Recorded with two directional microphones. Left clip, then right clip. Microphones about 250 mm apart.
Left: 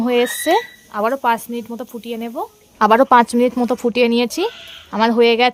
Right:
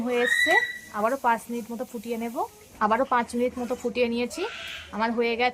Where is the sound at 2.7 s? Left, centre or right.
Left.